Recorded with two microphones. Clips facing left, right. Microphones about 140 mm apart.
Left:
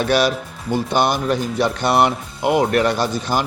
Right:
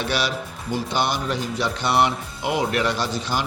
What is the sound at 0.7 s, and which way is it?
Speech, 50° left (ahead or behind).